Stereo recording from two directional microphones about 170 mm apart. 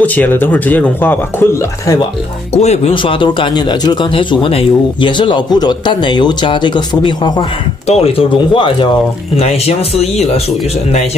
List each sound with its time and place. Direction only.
0.0 s speech: 10° left (ahead or behind)
2.5 s a man's voice: 40° left (ahead or behind)